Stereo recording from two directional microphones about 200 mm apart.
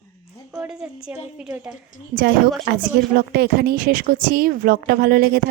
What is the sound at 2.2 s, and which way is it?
Speech, 50° right (ahead or behind).